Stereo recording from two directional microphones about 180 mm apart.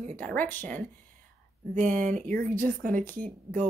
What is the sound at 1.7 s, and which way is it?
Speech, 45° right (ahead or behind).